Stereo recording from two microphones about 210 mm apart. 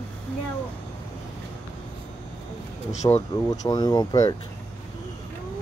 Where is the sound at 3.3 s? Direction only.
15° left (ahead or behind).